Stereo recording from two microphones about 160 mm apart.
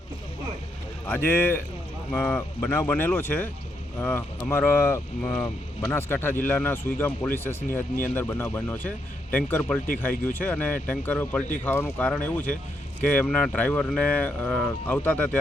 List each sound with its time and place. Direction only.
1.0 s speech: 15° left (ahead or behind)